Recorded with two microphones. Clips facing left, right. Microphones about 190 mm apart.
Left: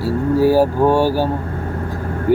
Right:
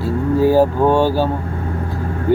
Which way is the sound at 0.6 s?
10° left (ahead or behind).